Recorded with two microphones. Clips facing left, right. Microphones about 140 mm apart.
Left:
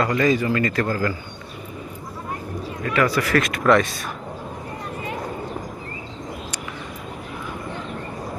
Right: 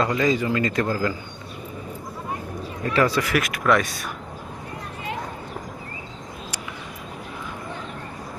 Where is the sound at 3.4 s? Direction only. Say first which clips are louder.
Left 5 dB; 5° right (ahead or behind).